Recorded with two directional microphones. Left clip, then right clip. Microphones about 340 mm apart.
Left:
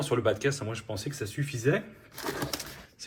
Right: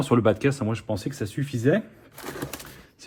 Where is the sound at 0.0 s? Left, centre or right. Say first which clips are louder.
Right 5 dB; centre.